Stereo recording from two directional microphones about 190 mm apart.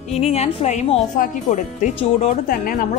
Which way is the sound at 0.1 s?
35° left (ahead or behind).